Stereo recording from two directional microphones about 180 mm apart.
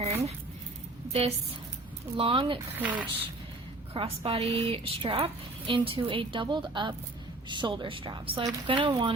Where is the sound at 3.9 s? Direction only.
35° right (ahead or behind).